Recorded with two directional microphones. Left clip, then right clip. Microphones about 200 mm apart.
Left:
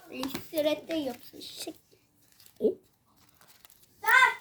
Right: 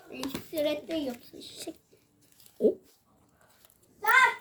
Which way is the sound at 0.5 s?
45° left (ahead or behind).